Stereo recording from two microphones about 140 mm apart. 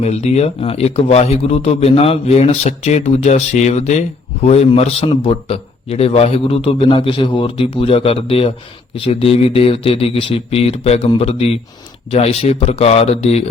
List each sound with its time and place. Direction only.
0.0 s a man's voice: 50° left (ahead or behind)